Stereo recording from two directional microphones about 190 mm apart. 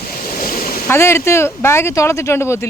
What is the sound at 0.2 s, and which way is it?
Stream, 50° left (ahead or behind).